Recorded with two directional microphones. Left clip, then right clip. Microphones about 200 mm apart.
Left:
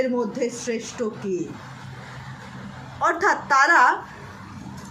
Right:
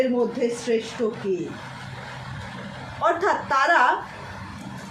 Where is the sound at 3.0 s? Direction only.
60° left (ahead or behind).